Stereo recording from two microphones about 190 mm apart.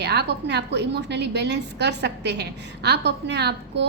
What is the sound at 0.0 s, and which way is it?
A woman's voice, 60° right (ahead or behind).